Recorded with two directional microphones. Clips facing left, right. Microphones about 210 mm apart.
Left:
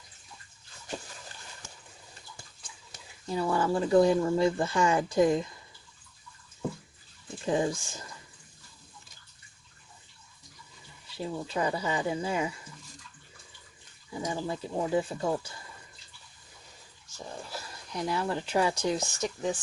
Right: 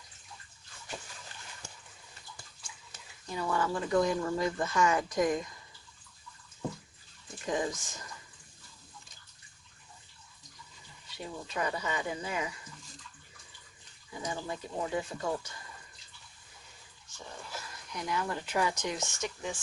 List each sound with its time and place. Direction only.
2.9 s speech: 30° left (ahead or behind)
7.4 s speech: 30° left (ahead or behind)
11.2 s speech: 30° left (ahead or behind)
14.1 s speech: 30° left (ahead or behind)
17.5 s speech: 30° left (ahead or behind)